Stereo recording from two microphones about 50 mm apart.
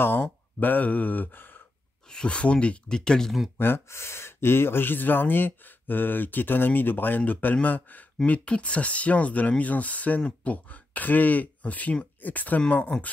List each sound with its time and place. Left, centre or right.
0.2 s speech: left
2.0 s speech: centre
3.3 s speech: centre
3.5 s speech: left
3.9 s speech: left
8.3 s speech: left